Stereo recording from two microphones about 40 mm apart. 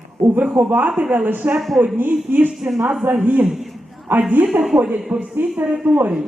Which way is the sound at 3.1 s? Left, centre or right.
Right.